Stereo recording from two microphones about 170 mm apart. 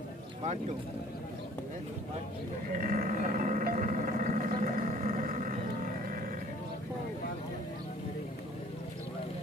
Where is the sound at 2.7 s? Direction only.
55° right (ahead or behind).